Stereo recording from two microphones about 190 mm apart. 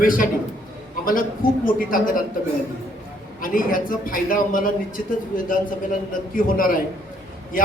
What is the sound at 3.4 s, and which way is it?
A man's voice, 45° left (ahead or behind).